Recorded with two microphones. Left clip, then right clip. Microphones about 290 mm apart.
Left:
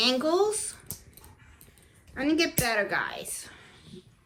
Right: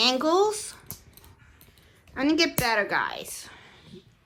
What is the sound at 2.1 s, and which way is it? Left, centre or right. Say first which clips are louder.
A woman's voice: right 3 dB; centre.